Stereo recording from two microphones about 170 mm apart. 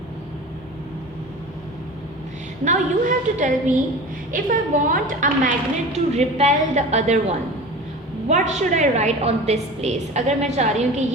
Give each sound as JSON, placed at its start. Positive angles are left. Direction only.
{"t": 2.6, "sound": "a woman's voice", "side_deg": -45}